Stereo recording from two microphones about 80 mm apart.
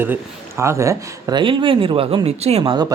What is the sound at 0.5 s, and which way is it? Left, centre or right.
Speech, right.